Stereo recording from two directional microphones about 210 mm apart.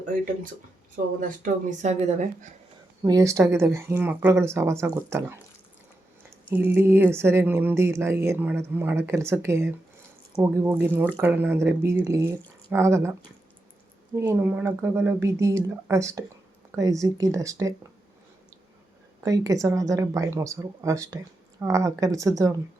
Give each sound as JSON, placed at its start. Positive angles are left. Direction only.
{"t": 1.4, "sound": "speech", "side_deg": -35}
{"t": 3.0, "sound": "speech", "side_deg": -15}
{"t": 6.5, "sound": "speech", "side_deg": -10}
{"t": 14.2, "sound": "speech", "side_deg": -10}
{"t": 19.2, "sound": "speech", "side_deg": -15}